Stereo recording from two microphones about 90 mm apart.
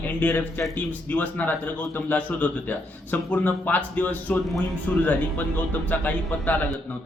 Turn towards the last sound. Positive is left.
turn(degrees=20)  # may be behind; listen again after turning